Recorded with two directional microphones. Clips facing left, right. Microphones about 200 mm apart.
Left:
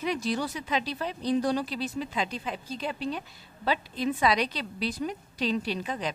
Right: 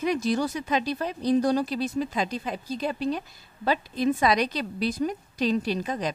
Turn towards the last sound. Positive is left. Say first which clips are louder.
# right 4 dB
turn(degrees=-40)  # may be behind; listen again after turning